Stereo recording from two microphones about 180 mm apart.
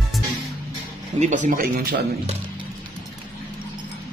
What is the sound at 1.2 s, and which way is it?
Speech, 45° right (ahead or behind).